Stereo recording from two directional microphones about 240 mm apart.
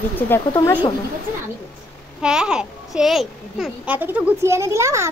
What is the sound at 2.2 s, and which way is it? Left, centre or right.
A child's voice, centre.